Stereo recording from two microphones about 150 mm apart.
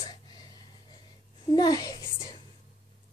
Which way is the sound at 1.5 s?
25° left (ahead or behind).